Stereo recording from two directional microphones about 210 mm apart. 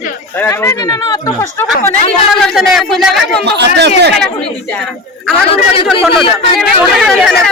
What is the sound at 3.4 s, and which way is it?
Speech, 55° right (ahead or behind).